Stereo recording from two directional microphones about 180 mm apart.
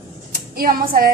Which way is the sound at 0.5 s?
55° right (ahead or behind).